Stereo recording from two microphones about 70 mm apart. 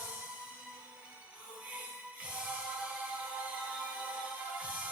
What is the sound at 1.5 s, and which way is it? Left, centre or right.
Music, centre.